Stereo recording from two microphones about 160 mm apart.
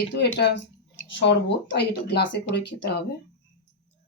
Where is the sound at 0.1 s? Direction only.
90° left.